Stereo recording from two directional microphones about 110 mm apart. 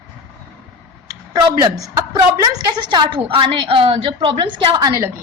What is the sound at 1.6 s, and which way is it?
Speech, 30° right (ahead or behind).